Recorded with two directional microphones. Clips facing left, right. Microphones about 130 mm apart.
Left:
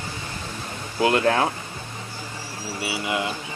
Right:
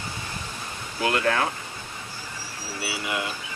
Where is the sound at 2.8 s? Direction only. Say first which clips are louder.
Left 3 dB; 20° left (ahead or behind).